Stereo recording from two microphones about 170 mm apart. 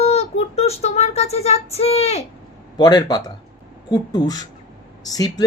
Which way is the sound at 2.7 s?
25° left (ahead or behind).